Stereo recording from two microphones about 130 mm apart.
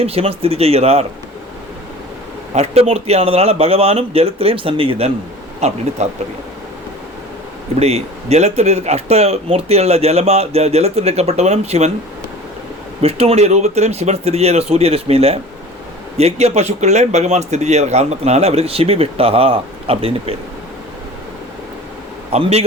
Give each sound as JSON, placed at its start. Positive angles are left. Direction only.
{"t": 0.0, "sound": "speech", "side_deg": -50}
{"t": 2.6, "sound": "a man's voice", "side_deg": -50}
{"t": 7.8, "sound": "a man's voice", "side_deg": -55}
{"t": 13.0, "sound": "a man's voice", "side_deg": -50}
{"t": 22.3, "sound": "speech", "side_deg": -55}